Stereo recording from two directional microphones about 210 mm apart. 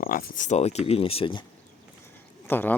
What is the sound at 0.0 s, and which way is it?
Speech, 45° left (ahead or behind).